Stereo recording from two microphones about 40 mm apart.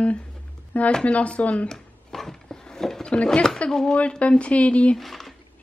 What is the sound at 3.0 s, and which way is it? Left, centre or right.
Speech, left.